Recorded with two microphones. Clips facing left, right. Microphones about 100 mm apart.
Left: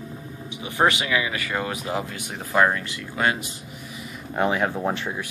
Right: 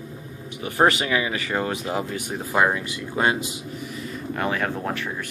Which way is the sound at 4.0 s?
15° left (ahead or behind).